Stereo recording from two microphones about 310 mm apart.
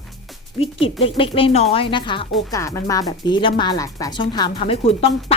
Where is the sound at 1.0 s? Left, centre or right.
Centre.